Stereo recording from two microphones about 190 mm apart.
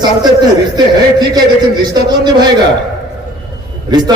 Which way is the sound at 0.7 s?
20° right (ahead or behind).